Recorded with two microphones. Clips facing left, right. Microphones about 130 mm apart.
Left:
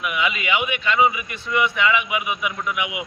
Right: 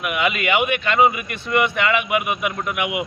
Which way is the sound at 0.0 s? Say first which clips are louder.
Right 3 dB; 60° right (ahead or behind).